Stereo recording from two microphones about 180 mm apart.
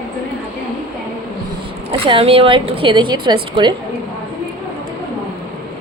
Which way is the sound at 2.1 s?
30° right (ahead or behind).